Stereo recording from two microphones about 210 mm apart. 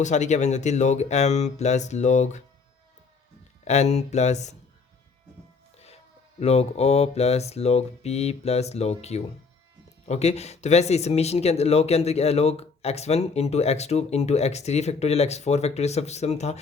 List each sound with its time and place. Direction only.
0.0 s speech: 35° left (ahead or behind)
3.6 s speech: 30° left (ahead or behind)
6.4 s speech: 30° left (ahead or behind)